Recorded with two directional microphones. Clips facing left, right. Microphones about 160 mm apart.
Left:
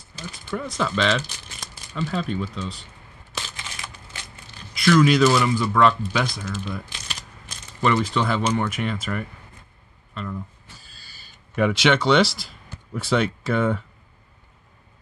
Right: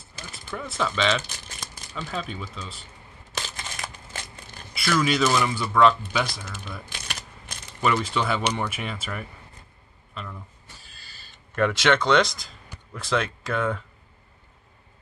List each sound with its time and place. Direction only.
0.5 s speech: centre (ahead or behind)
3.3 s a sound: 40° right (ahead or behind)
4.7 s speech: 5° right (ahead or behind)
7.8 s speech: 5° right (ahead or behind)
11.5 s speech: 5° left (ahead or behind)